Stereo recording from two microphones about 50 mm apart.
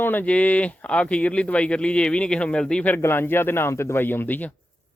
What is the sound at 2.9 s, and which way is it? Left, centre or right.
Speech, left.